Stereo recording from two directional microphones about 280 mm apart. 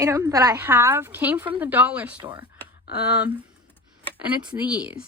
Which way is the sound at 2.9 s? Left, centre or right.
Left.